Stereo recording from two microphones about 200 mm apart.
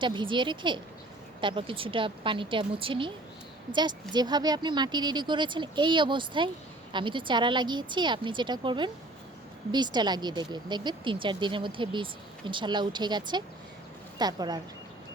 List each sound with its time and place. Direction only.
0.0 s speech: 25° right (ahead or behind)
4.1 s speech: 20° right (ahead or behind)